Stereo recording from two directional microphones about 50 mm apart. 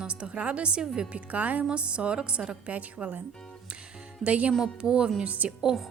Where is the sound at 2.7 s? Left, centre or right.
Right.